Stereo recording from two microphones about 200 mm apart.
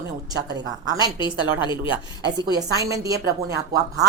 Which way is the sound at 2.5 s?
20° right (ahead or behind).